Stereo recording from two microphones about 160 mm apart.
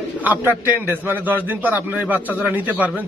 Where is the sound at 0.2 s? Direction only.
10° right (ahead or behind).